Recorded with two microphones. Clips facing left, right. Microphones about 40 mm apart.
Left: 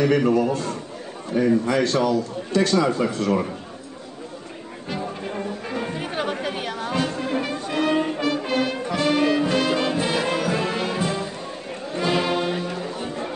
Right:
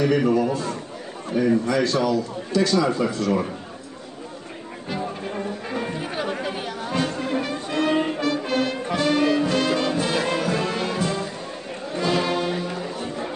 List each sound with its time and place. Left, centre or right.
0.3 s a man's voice: left
4.8 s music: centre
5.9 s chatter: left
7.0 s music: centre
12.6 s music: centre